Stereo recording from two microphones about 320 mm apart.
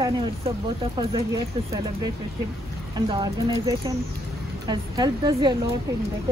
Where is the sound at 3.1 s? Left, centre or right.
Centre.